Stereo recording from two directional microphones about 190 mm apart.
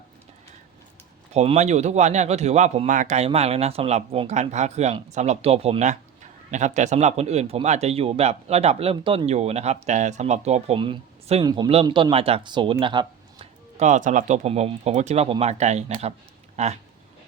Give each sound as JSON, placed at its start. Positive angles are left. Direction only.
{"t": 1.3, "sound": "speech", "side_deg": -35}
{"t": 13.7, "sound": "speech", "side_deg": -40}